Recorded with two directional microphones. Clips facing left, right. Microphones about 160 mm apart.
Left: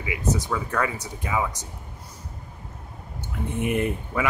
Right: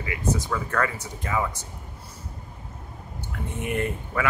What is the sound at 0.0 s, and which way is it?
Speech, 15° left (ahead or behind).